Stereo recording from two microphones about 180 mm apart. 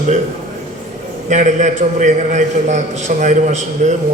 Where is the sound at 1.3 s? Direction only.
40° right (ahead or behind).